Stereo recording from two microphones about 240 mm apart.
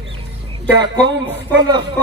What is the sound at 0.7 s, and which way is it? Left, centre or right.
A man's voice, centre.